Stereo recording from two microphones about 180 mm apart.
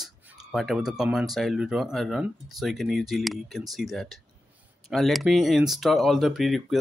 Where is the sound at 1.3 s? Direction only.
Centre (ahead or behind).